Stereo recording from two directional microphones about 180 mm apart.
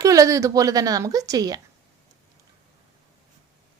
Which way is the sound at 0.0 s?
20° right (ahead or behind).